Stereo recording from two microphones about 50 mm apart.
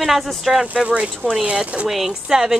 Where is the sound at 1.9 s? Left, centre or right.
Centre.